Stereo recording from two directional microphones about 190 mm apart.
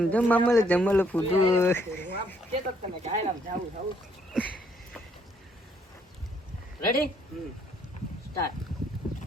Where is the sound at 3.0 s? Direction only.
35° right (ahead or behind).